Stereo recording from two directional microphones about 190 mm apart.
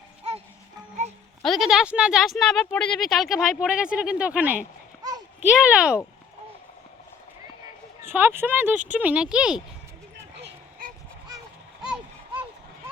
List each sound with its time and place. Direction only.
1.4 s speech: centre (ahead or behind)
8.0 s speech: 10° right (ahead or behind)
10.2 s a sound: 65° right (ahead or behind)